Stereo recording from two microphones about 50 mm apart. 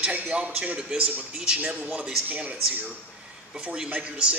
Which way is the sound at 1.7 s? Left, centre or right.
Right.